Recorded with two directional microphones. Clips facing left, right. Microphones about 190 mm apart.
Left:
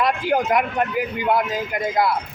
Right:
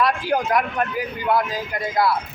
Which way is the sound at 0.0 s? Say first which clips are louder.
Left 1 dB; 20° left (ahead or behind).